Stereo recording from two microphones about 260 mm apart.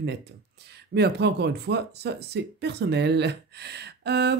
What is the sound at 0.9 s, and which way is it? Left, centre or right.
Speech, right.